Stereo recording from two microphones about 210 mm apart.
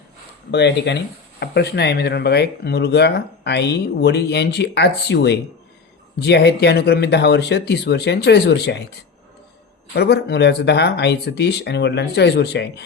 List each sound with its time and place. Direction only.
0.5 s speech: 55° left (ahead or behind)
9.9 s speech: 50° left (ahead or behind)